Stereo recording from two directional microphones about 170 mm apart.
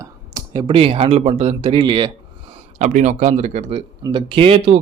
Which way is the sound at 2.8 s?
45° right (ahead or behind).